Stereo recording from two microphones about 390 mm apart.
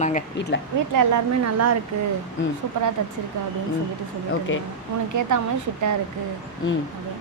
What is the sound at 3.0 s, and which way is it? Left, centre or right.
Speech, right.